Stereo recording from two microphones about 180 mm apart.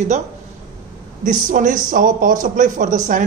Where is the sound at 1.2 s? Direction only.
45° right (ahead or behind).